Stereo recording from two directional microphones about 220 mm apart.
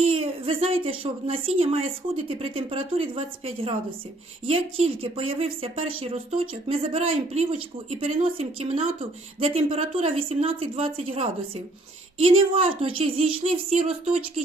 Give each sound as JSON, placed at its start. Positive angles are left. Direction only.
{"t": 0.0, "sound": "a woman's voice", "side_deg": -25}